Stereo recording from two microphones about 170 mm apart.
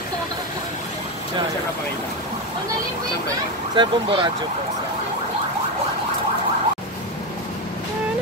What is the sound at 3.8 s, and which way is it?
Speech, 30° right (ahead or behind).